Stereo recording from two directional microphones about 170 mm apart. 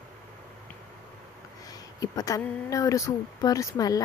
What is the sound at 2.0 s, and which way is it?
Speech, 20° left (ahead or behind).